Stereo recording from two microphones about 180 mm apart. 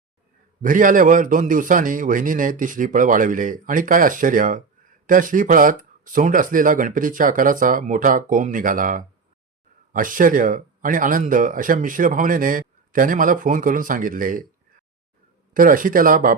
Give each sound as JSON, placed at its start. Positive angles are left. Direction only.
{"t": 0.6, "sound": "speech", "side_deg": -45}
{"t": 15.5, "sound": "speech", "side_deg": -50}